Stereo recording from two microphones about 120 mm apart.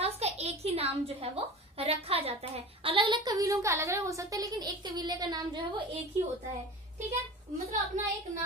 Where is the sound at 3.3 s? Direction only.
25° right (ahead or behind).